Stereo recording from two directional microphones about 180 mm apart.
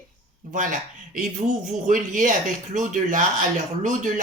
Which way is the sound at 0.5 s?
45° right (ahead or behind).